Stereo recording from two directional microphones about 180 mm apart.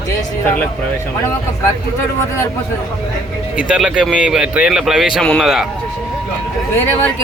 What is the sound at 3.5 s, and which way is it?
Speech, 5° right (ahead or behind).